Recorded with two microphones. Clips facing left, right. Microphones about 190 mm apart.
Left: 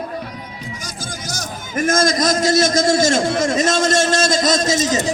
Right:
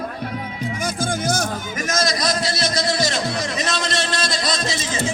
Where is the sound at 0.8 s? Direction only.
55° right (ahead or behind).